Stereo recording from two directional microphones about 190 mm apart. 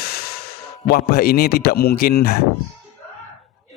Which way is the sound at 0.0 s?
55° left (ahead or behind).